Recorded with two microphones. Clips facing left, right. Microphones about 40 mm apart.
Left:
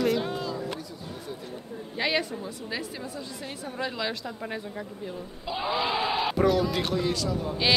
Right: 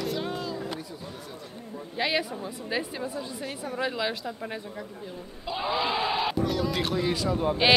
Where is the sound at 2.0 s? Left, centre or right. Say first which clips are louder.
Even; centre.